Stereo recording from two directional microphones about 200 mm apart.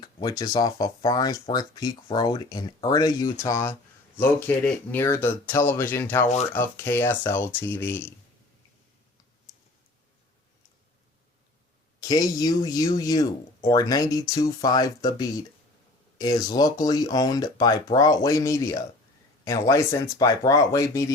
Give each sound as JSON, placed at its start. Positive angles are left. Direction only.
{"t": 0.0, "sound": "speech", "side_deg": 20}
{"t": 11.9, "sound": "speech", "side_deg": 20}